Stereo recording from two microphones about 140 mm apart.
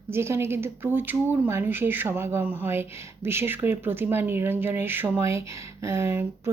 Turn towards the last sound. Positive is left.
turn(degrees=-15)  # may be behind; listen again after turning